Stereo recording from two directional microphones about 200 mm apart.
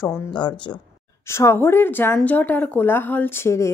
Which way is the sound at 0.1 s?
20° left (ahead or behind).